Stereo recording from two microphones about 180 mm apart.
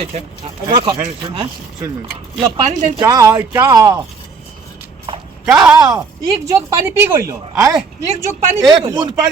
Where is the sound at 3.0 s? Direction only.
15° right (ahead or behind).